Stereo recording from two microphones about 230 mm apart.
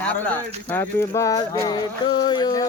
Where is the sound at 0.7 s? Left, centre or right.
Centre.